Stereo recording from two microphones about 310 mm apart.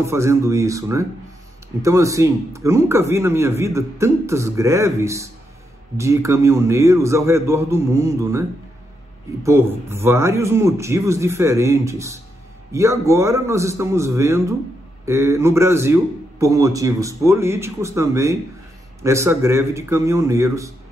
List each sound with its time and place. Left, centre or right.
0.0 s a man's voice: centre